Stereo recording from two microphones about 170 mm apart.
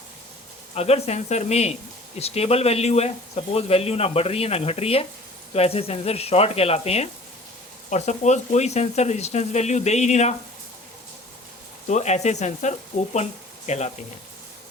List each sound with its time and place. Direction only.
0.7 s speech: 35° left (ahead or behind)
11.9 s speech: 45° left (ahead or behind)